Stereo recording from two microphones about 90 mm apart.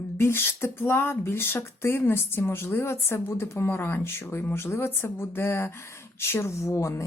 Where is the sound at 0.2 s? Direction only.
25° left (ahead or behind).